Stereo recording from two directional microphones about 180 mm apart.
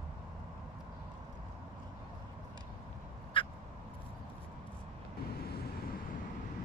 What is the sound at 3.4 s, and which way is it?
Fowl, 30° left (ahead or behind).